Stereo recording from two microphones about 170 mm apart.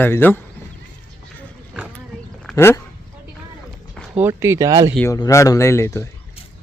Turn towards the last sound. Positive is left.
turn(degrees=15)  # may be behind; listen again after turning